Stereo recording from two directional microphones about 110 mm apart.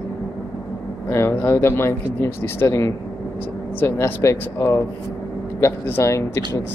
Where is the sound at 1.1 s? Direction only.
20° left (ahead or behind).